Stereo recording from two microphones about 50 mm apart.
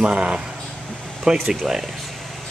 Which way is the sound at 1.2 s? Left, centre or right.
Centre.